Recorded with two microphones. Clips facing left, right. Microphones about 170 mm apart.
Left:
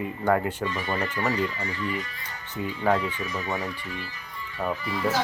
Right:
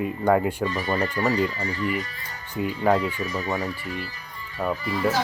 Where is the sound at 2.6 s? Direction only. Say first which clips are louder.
Right 4 dB; 15° right (ahead or behind).